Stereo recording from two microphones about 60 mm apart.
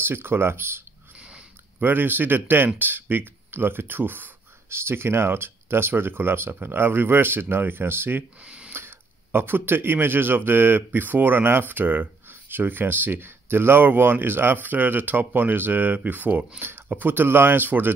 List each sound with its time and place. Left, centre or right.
0.0 s speech: right
8.5 s a sound: right
8.7 s speech: right